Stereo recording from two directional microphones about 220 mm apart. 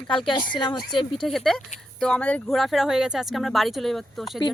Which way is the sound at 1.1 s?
Centre (ahead or behind).